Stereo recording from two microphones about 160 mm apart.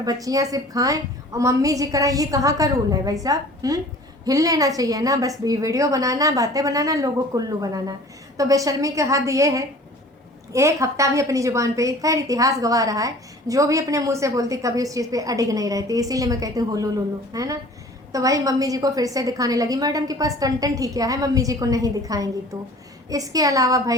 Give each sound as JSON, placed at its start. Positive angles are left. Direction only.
{"t": 0.0, "sound": "a woman's voice", "side_deg": -25}